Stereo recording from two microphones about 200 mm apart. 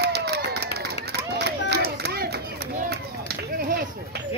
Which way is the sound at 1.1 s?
55° right (ahead or behind).